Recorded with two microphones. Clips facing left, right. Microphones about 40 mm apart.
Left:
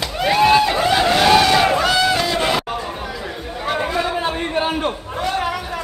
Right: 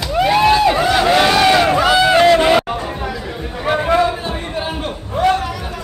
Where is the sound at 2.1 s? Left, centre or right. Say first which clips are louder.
Right 10 dB; right.